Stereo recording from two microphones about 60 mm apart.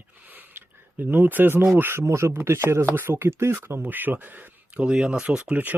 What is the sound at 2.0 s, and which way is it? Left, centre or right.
Speech, right.